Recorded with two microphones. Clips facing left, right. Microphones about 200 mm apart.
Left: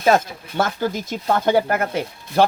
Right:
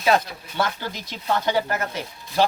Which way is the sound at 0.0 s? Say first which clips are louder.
Left 3 dB; 50° left (ahead or behind).